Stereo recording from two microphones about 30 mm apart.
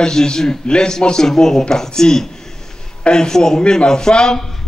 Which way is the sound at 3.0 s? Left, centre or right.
Left.